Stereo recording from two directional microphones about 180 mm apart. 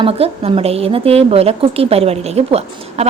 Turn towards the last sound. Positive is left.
turn(degrees=-35)  # may be behind; listen again after turning